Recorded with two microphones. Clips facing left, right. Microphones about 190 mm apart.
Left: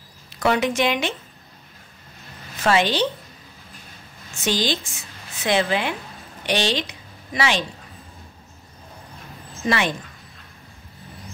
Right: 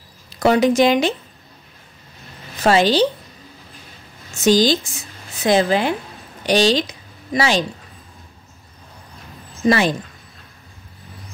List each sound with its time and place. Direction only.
0.4 s speech: 35° right (ahead or behind)
2.6 s speech: 35° right (ahead or behind)
4.4 s a woman's voice: 40° right (ahead or behind)
9.7 s speech: 35° right (ahead or behind)